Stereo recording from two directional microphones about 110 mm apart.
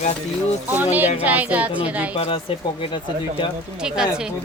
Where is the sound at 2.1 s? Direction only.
55° left (ahead or behind).